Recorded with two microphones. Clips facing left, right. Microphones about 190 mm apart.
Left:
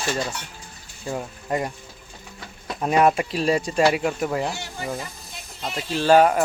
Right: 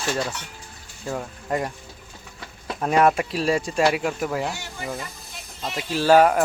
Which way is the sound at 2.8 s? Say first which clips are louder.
Even; 5° left (ahead or behind).